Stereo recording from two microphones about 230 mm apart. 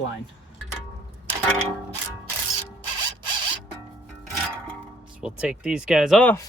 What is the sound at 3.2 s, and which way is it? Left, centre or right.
Zipper, centre.